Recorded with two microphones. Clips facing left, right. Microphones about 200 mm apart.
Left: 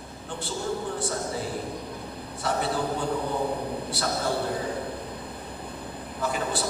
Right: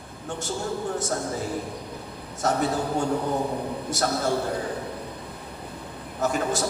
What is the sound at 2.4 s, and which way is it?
Speech, 45° right (ahead or behind).